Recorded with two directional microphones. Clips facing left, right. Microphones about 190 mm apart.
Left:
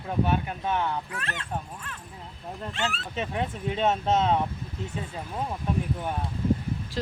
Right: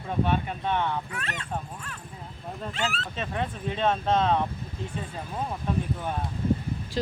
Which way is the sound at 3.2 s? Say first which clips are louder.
Left 2 dB; 15° left (ahead or behind).